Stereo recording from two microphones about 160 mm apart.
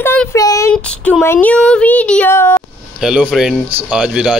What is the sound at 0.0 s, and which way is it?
Child singing, 15° left (ahead or behind).